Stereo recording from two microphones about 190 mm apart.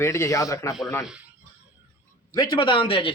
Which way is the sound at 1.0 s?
5° right (ahead or behind).